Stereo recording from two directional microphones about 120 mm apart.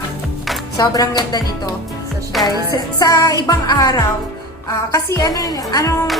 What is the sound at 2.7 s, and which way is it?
Music, 30° left (ahead or behind).